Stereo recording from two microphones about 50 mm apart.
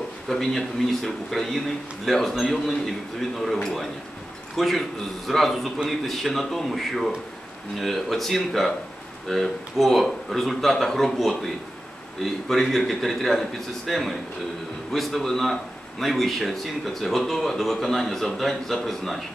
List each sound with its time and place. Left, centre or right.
0.3 s a man's voice: centre
4.6 s a man's voice: centre